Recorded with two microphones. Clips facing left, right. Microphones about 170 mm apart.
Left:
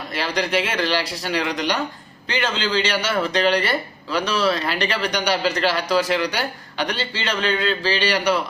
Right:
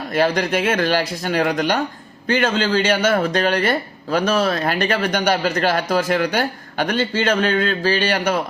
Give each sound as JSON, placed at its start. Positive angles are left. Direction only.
{"t": 0.1, "sound": "speech", "side_deg": -50}